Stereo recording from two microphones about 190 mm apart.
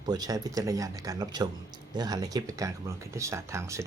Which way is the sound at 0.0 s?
20° right (ahead or behind).